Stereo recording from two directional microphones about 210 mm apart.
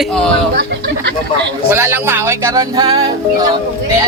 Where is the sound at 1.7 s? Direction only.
10° right (ahead or behind).